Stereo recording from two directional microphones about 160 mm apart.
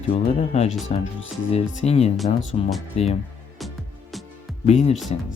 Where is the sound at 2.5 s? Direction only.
50° left (ahead or behind).